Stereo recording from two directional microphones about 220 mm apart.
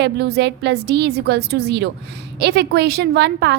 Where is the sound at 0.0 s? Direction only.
50° right (ahead or behind).